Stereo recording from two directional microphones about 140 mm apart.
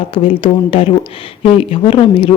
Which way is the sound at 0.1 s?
40° left (ahead or behind).